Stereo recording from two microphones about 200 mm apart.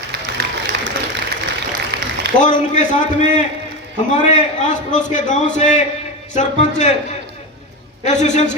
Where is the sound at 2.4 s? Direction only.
40° left (ahead or behind).